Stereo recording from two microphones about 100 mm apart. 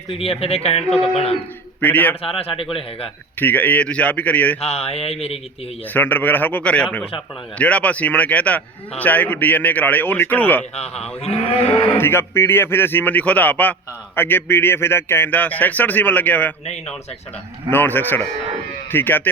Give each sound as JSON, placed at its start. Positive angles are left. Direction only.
{"t": 0.1, "sound": "speech", "side_deg": 70}
{"t": 0.9, "sound": "speech", "side_deg": 0}
{"t": 1.1, "sound": "speech", "side_deg": 80}
{"t": 1.8, "sound": "a man's voice", "side_deg": 15}
{"t": 2.2, "sound": "cattle", "side_deg": 70}
{"t": 3.4, "sound": "a man's voice", "side_deg": 15}
{"t": 4.6, "sound": "speech", "side_deg": 90}
{"t": 5.9, "sound": "a man's voice", "side_deg": 20}
{"t": 11.2, "sound": "cattle", "side_deg": 85}
{"t": 11.9, "sound": "a man's voice", "side_deg": 25}
{"t": 17.7, "sound": "a man's voice", "side_deg": 20}